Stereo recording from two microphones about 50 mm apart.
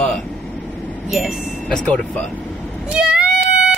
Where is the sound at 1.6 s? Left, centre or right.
Left.